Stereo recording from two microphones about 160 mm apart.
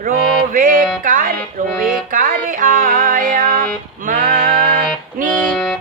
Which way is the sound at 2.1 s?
60° right (ahead or behind).